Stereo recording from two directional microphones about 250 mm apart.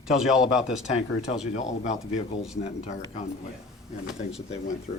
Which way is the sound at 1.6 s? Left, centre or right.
Left.